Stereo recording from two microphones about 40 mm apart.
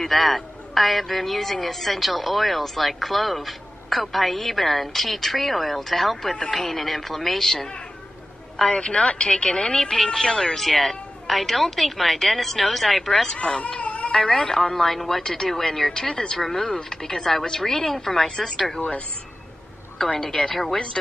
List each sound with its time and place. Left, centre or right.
0.0 s a man's voice: centre
8.6 s a woman's voice: left
13.4 s speech: left
14.2 s a woman's voice: centre
18.2 s a woman's voice: centre
20.2 s a woman's voice: centre